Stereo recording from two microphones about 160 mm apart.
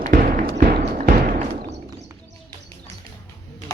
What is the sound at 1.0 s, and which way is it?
Thump, 60° right (ahead or behind).